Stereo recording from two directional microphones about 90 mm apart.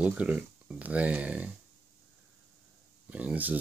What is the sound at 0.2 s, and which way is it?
Speech, 15° right (ahead or behind).